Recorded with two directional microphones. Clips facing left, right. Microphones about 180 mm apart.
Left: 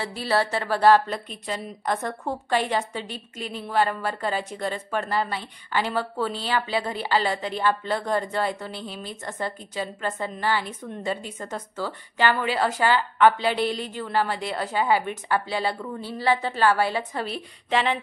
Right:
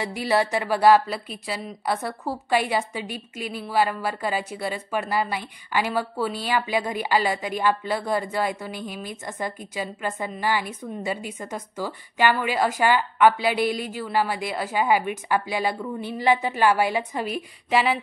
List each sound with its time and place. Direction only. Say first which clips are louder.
0.0 s a woman's voice: right 2 dB; 15° right (ahead or behind)